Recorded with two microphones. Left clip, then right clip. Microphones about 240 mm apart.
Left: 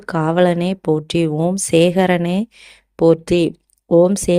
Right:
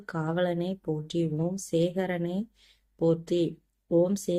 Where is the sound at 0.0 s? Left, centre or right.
Left.